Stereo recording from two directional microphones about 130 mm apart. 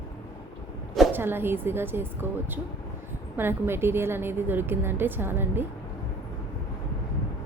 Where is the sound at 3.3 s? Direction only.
15° right (ahead or behind).